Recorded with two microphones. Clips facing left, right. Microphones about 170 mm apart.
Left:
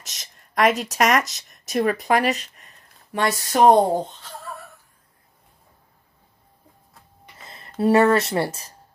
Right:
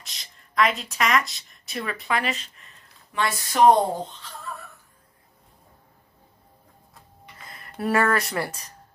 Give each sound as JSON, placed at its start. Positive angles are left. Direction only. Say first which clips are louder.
{"t": 0.0, "sound": "speech", "louder": "left 2 dB", "side_deg": 45}
{"t": 7.4, "sound": "speech", "louder": "left 7 dB", "side_deg": 25}